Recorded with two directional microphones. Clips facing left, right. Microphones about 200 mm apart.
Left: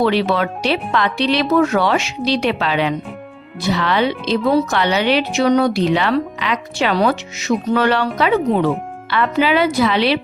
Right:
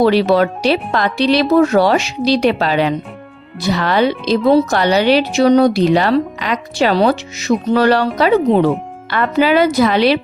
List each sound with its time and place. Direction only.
0.0 s speech: 40° right (ahead or behind)